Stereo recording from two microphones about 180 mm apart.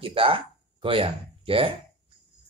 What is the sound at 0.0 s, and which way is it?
Speech, 30° right (ahead or behind).